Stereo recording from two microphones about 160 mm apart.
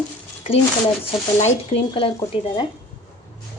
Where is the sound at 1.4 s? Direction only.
40° left (ahead or behind).